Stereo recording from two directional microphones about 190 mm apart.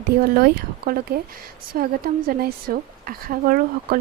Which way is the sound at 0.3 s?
50° right (ahead or behind).